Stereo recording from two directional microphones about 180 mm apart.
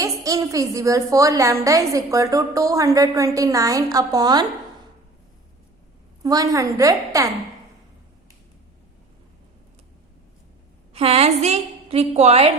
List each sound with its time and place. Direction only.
0.0 s a woman's voice: 20° right (ahead or behind)
6.2 s a woman's voice: 20° right (ahead or behind)
10.9 s a woman's voice: 35° right (ahead or behind)